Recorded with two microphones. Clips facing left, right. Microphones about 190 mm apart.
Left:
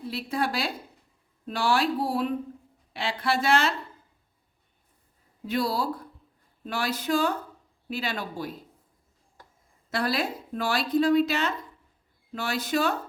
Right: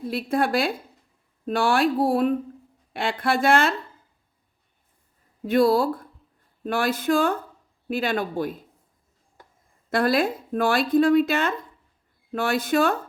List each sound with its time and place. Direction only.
0.1 s speech: 50° right (ahead or behind)
5.5 s speech: 50° right (ahead or behind)
9.9 s speech: 50° right (ahead or behind)